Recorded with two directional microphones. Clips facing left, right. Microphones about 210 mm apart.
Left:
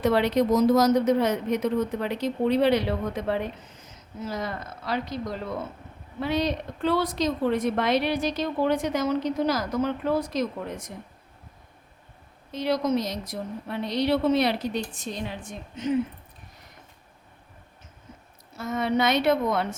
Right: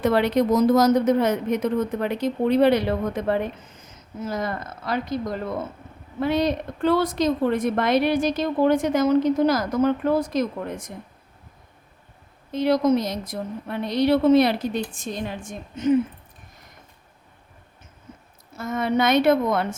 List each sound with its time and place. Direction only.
0.0 s a woman's voice: 55° right (ahead or behind)
12.5 s a woman's voice: 55° right (ahead or behind)
18.5 s a woman's voice: 50° right (ahead or behind)